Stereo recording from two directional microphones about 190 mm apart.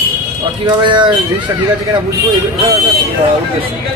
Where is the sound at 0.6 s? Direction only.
25° right (ahead or behind).